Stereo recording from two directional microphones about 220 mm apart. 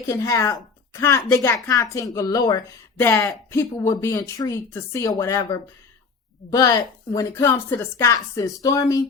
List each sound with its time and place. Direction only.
0.1 s speech: 15° left (ahead or behind)